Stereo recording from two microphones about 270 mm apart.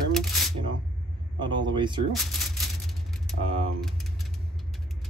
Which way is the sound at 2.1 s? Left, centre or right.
Centre.